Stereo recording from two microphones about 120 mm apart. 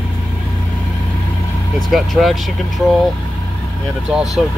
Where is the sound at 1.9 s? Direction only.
Centre (ahead or behind).